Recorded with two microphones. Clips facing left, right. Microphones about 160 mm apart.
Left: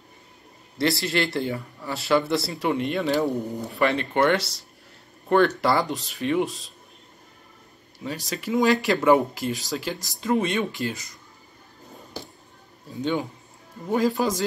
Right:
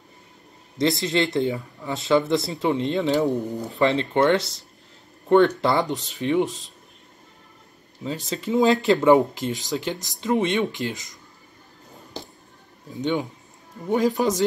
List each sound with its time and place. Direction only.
0.7 s speech: 20° right (ahead or behind)
8.3 s speech: 25° right (ahead or behind)
13.0 s speech: 20° right (ahead or behind)